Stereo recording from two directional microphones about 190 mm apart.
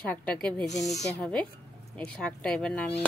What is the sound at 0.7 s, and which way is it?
Speech, 35° left (ahead or behind).